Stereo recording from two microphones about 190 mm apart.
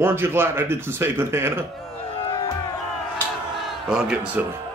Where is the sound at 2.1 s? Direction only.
30° left (ahead or behind).